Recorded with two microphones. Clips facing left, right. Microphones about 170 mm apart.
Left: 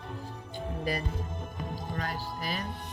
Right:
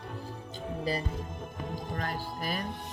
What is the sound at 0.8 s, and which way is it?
Speech, 30° right (ahead or behind).